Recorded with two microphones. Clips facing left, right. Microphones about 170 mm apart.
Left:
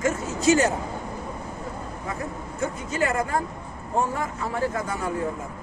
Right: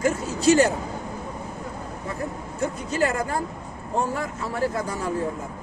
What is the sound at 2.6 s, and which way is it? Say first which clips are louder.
Speech: right 2 dB; 35° right (ahead or behind).